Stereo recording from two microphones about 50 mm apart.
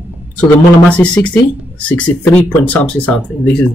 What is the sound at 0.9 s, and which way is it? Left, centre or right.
Speech, left.